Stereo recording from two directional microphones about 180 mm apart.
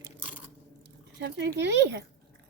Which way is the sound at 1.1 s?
60° right (ahead or behind).